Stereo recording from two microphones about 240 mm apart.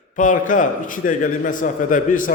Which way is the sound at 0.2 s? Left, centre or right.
Left.